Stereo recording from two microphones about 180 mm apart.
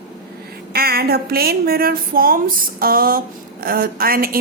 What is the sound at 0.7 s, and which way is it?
A woman's voice, 60° right (ahead or behind).